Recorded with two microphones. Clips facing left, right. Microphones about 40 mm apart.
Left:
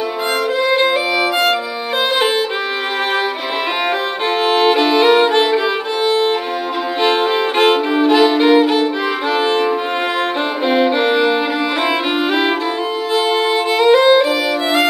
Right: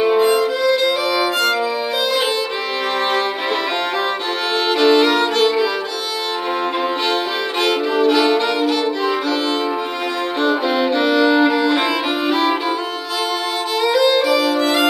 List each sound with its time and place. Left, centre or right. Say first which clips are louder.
0.6 s violin: left 2 dB; left
4.5 s violin: left 1 dB; left
7.1 s violin: left 5 dB; left
8.0 s violin: left 3 dB; left
10.4 s violin: even; left
13.7 s violin: left 5 dB; left